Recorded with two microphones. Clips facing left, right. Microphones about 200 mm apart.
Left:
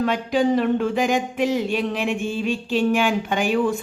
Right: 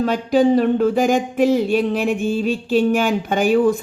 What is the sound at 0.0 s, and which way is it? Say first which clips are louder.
A woman's voice: right 4 dB; 45° right (ahead or behind).